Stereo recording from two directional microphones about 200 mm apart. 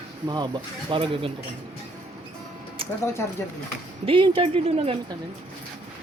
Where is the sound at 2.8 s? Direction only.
25° right (ahead or behind).